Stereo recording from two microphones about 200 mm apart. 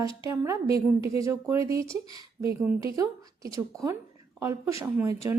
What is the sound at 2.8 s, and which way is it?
A woman's voice, 15° right (ahead or behind).